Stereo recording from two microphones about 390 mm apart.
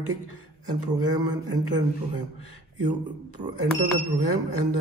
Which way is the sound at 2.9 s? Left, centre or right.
Centre.